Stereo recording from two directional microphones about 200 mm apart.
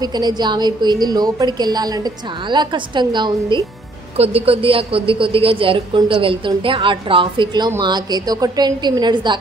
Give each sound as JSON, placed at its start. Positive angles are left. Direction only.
{"t": 0.0, "sound": "a woman's voice", "side_deg": -20}